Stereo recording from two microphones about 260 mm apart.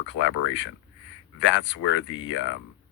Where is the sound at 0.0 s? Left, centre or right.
Left.